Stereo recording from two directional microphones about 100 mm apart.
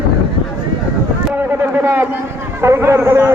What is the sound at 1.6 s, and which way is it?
A man's voice, 20° right (ahead or behind).